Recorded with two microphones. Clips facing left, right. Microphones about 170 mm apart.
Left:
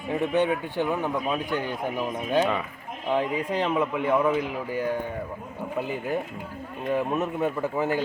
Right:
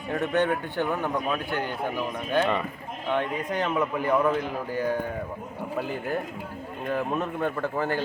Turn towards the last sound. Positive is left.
turn(degrees=5)  # may be behind; listen again after turning